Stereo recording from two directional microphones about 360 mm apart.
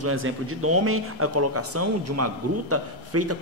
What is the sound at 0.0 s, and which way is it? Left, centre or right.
A man's voice, right.